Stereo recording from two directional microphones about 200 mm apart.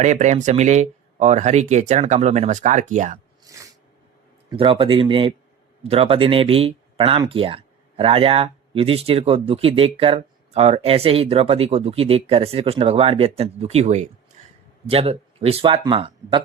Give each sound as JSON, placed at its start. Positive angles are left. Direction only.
{"t": 0.0, "sound": "speech", "side_deg": -35}
{"t": 3.4, "sound": "sneeze", "side_deg": -15}
{"t": 4.5, "sound": "speech", "side_deg": -25}